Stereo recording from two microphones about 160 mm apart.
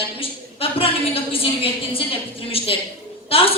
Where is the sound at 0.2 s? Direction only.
35° left (ahead or behind).